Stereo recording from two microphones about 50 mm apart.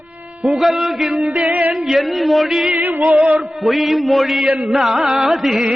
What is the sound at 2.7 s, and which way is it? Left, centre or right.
Music, right.